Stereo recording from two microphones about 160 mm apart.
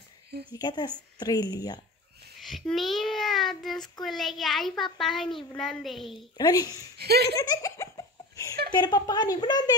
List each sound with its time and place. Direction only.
0.5 s a woman's voice: 25° left (ahead or behind)
2.3 s a child's voice: centre (ahead or behind)
6.3 s a woman's voice: 25° left (ahead or behind)
7.0 s laughter: 90° right
7.3 s a woman's voice: 20° left (ahead or behind)